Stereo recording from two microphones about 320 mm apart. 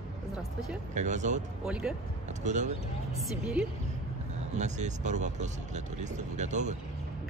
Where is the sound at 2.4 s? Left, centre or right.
Right.